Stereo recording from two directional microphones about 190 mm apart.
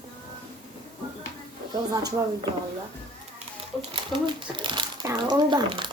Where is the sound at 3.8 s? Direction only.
25° right (ahead or behind).